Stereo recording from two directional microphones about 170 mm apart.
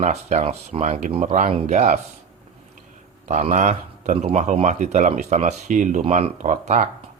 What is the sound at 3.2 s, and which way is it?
A man's voice, 45° right (ahead or behind).